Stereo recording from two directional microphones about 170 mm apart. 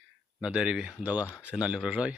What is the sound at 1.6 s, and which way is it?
Speech, 5° right (ahead or behind).